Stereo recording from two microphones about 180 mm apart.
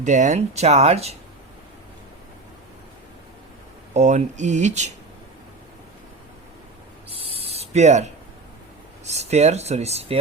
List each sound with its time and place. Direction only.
0.0 s speech: 40° right (ahead or behind)
3.9 s speech: 40° right (ahead or behind)
7.1 s owl: 30° right (ahead or behind)
9.0 s speech: 40° right (ahead or behind)